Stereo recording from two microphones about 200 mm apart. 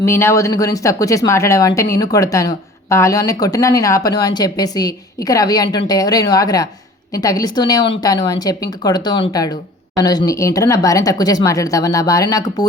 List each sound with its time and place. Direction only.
0.0 s speech: 15° left (ahead or behind)